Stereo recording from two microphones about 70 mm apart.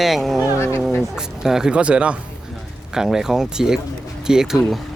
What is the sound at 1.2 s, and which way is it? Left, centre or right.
Speech, centre.